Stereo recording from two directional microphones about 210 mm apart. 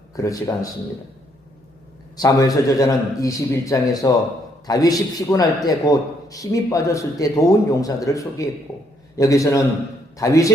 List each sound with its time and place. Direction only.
0.2 s a man's voice: 15° left (ahead or behind)
2.1 s a man's voice: 15° left (ahead or behind)